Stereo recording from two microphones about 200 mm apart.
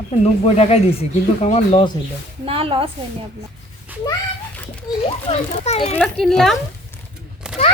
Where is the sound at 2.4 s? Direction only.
25° right (ahead or behind).